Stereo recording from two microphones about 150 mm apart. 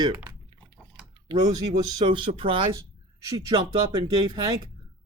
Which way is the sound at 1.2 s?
25° right (ahead or behind).